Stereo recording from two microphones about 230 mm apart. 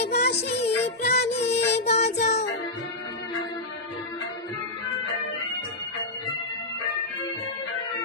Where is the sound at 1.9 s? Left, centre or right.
Left.